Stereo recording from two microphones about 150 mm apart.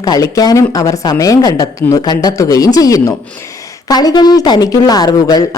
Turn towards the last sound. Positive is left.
turn(degrees=25)  # may be behind; listen again after turning